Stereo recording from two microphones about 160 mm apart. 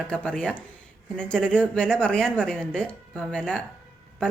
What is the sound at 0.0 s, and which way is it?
A woman's voice, 5° left (ahead or behind).